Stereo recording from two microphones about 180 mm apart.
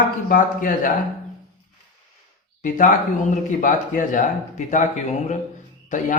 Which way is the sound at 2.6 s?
45° left (ahead or behind).